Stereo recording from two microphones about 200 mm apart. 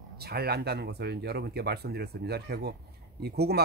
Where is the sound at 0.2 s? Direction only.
50° right (ahead or behind).